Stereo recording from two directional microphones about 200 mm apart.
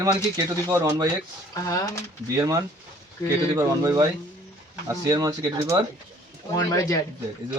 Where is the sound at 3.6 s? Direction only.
15° right (ahead or behind).